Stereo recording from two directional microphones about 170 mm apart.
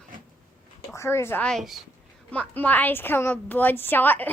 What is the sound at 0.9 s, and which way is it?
A woman's voice, 15° left (ahead or behind).